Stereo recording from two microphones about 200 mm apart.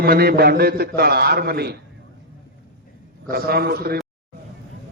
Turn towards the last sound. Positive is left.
turn(degrees=-50)  # may be behind; listen again after turning